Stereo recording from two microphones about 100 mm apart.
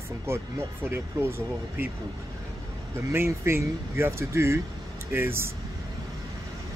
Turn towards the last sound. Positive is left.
turn(degrees=-25)  # may be behind; listen again after turning